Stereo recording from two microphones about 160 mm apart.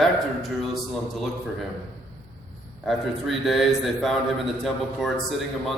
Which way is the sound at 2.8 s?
Centre (ahead or behind).